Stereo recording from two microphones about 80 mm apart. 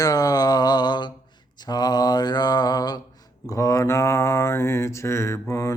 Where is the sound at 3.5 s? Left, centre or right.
Left.